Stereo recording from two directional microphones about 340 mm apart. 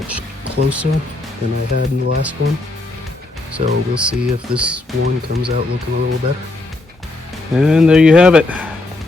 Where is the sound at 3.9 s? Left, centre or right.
Centre.